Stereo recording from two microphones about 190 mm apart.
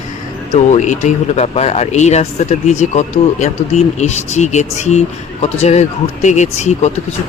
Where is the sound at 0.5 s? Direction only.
40° left (ahead or behind).